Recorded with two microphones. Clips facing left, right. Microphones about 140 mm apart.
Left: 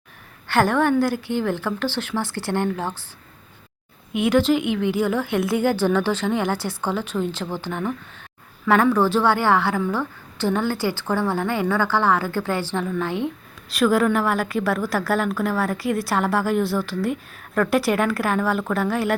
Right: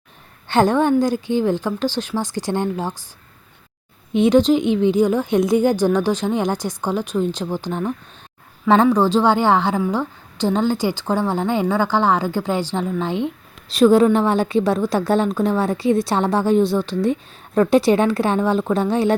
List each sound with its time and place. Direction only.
0.4 s a woman's voice: 20° right (ahead or behind)
4.2 s a woman's voice: 20° right (ahead or behind)